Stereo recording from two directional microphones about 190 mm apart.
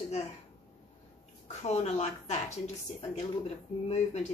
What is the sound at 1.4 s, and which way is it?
A woman's voice, 35° left (ahead or behind).